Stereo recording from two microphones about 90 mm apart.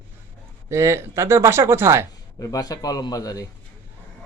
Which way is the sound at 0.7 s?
30° right (ahead or behind).